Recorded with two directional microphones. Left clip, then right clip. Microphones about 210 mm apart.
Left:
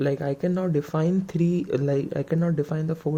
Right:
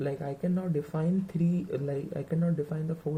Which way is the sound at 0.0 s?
50° left (ahead or behind).